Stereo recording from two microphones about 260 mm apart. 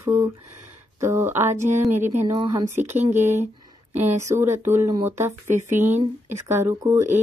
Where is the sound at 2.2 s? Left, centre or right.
Centre.